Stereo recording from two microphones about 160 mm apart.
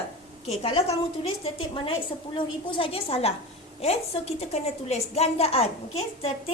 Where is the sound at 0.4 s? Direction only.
40° left (ahead or behind).